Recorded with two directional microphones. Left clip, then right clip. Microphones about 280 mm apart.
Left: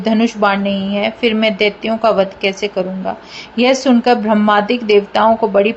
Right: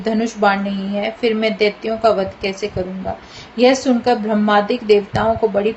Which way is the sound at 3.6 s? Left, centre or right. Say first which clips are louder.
Left 1 dB; left.